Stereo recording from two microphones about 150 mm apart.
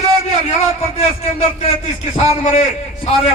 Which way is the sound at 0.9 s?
45° left (ahead or behind).